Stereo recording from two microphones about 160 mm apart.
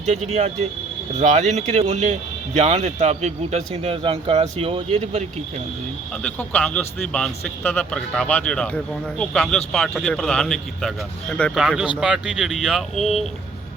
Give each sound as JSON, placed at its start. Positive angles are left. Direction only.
{"t": 0.1, "sound": "a man's voice", "side_deg": -40}
{"t": 6.2, "sound": "speech", "side_deg": 5}